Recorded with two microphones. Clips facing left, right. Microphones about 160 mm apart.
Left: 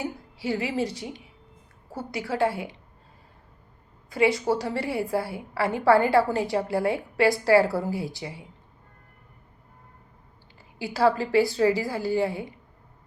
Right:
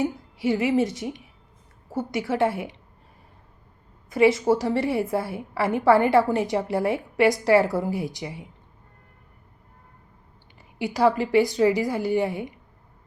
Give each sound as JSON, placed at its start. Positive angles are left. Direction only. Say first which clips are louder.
{"t": 0.0, "sound": "a woman's voice", "louder": "right 6 dB", "side_deg": -20}
{"t": 4.1, "sound": "a woman's voice", "louder": "right 4 dB", "side_deg": -25}
{"t": 10.8, "sound": "a woman's voice", "louder": "right 2 dB", "side_deg": -20}